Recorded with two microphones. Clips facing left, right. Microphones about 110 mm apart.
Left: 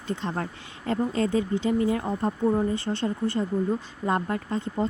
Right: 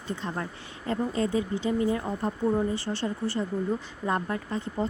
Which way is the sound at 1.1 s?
15° right (ahead or behind).